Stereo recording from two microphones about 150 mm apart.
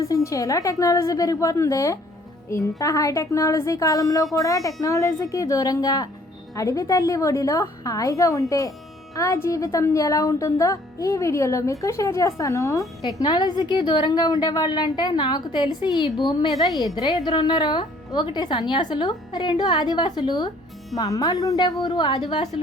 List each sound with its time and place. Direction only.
0.0 s speech: 20° left (ahead or behind)